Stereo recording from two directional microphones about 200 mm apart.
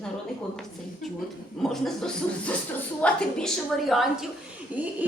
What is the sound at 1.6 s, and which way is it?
A woman's voice, centre (ahead or behind).